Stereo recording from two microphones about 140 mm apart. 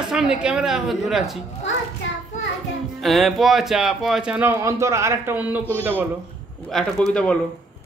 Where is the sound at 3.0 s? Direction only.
Centre (ahead or behind).